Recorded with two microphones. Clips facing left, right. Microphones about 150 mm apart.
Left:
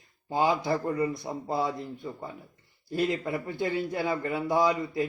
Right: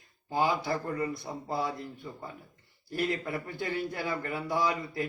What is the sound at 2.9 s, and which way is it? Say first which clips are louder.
Speech: left 3 dB; 20° left (ahead or behind).